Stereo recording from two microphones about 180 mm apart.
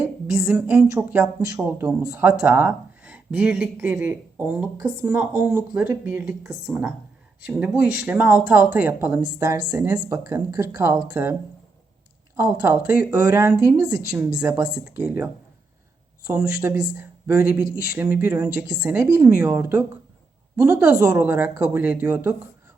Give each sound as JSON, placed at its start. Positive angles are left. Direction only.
{"t": 0.3, "sound": "a sound", "side_deg": -5}
{"t": 0.9, "sound": "speech", "side_deg": -10}
{"t": 12.4, "sound": "speech", "side_deg": -10}
{"t": 16.5, "sound": "speech", "side_deg": -20}